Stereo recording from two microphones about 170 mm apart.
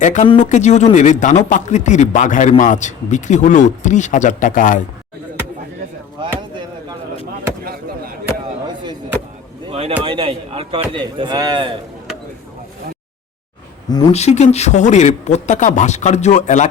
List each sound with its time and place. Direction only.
0.0 s speech: 45° left (ahead or behind)
7.6 s chop: 60° right (ahead or behind)
8.6 s chop: 25° right (ahead or behind)
9.6 s speech: 30° right (ahead or behind)
14.1 s speech: 40° left (ahead or behind)